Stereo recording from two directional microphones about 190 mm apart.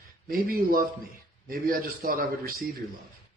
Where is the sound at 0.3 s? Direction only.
50° right (ahead or behind).